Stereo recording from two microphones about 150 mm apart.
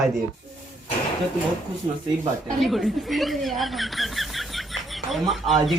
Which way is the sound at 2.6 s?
Centre (ahead or behind).